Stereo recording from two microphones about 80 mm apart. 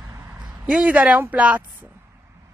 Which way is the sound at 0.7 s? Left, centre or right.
Centre.